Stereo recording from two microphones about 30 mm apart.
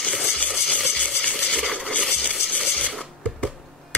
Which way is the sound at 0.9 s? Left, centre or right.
Left.